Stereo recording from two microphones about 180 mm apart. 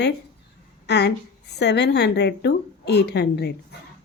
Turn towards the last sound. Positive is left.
turn(degrees=65)  # may be behind; listen again after turning